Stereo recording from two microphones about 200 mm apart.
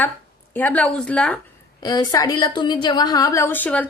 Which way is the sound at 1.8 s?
20° left (ahead or behind).